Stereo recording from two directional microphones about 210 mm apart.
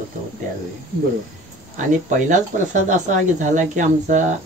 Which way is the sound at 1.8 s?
35° right (ahead or behind).